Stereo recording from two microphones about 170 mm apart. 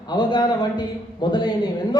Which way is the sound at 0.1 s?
25° left (ahead or behind).